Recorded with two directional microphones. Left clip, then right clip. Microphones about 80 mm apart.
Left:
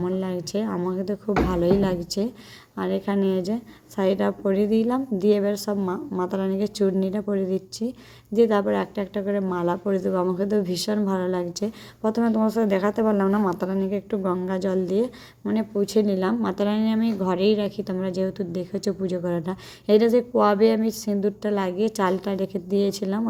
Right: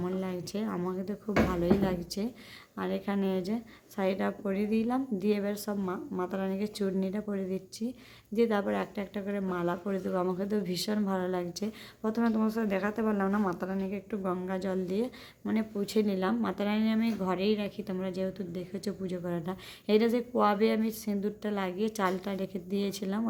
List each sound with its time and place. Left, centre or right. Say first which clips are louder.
0.2 s a sound: left 8 dB; left
0.7 s a woman's voice: left 8 dB; left
13.2 s a woman's voice: left 8 dB; left
13.5 s a woman's voice: left 9 dB; left
15.4 s a woman's voice: left 9 dB; left